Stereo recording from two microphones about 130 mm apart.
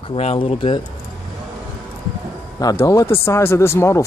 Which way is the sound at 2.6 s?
25° left (ahead or behind).